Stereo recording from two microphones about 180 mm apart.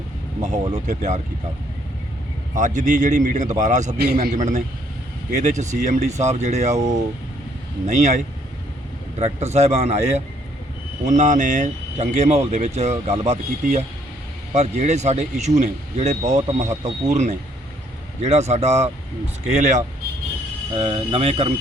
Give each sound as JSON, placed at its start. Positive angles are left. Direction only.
{"t": 0.9, "sound": "speech", "side_deg": -40}
{"t": 2.6, "sound": "speech", "side_deg": -40}
{"t": 3.9, "sound": "a man's voice", "side_deg": -60}
{"t": 4.4, "sound": "speech", "side_deg": -40}